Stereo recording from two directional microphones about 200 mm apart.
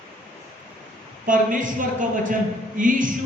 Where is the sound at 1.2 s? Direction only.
40° right (ahead or behind).